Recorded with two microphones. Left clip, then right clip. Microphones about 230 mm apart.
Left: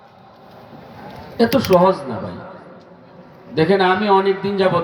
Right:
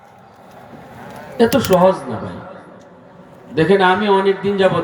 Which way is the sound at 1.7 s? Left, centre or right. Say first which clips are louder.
Even; left.